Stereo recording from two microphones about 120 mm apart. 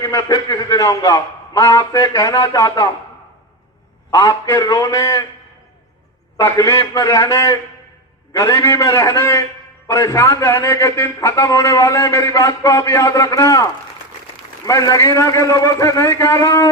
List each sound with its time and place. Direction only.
0.0 s a man's voice: 25° left (ahead or behind)
4.1 s a man's voice: 30° left (ahead or behind)
6.3 s a man's voice: 25° left (ahead or behind)
14.7 s a man's voice: 30° left (ahead or behind)